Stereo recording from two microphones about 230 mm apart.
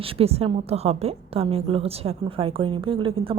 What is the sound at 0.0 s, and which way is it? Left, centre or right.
A woman's voice, right.